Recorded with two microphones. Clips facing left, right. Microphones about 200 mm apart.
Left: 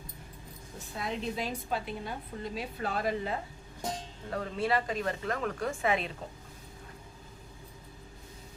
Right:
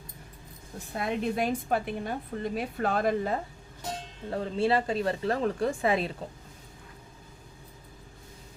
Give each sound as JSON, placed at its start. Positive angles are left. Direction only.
{"t": 0.9, "sound": "a woman's voice", "side_deg": -60}
{"t": 4.3, "sound": "speech", "side_deg": -30}